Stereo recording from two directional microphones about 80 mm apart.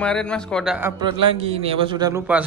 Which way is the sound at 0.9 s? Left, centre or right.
Right.